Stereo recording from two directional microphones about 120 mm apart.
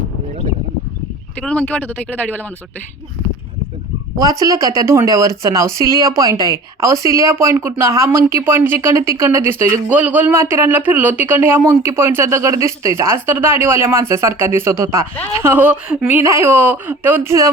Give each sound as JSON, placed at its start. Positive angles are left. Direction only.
{"t": 1.4, "sound": "speech", "side_deg": 10}
{"t": 4.2, "sound": "speech", "side_deg": -30}